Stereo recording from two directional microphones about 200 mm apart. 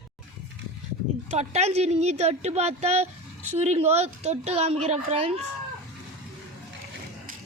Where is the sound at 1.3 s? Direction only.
35° right (ahead or behind).